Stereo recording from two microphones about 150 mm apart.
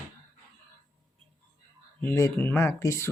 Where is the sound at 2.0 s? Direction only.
15° left (ahead or behind).